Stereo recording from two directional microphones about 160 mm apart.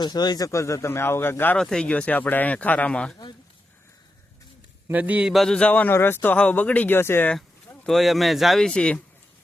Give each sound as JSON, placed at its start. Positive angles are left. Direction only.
{"t": 0.0, "sound": "a man's voice", "side_deg": 25}
{"t": 4.9, "sound": "a man's voice", "side_deg": -10}
{"t": 7.3, "sound": "speech", "side_deg": 0}